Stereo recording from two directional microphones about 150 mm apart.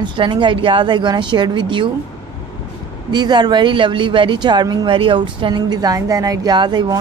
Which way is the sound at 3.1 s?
30° right (ahead or behind).